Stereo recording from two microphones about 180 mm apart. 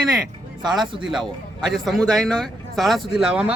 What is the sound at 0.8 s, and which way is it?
Speech, centre (ahead or behind).